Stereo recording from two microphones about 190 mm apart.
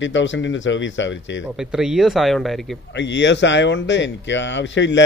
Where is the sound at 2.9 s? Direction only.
70° left (ahead or behind).